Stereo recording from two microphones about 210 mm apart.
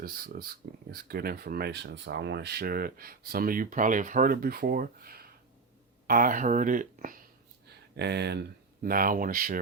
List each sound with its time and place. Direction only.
0.0 s speech: 45° right (ahead or behind)
7.9 s speech: 50° right (ahead or behind)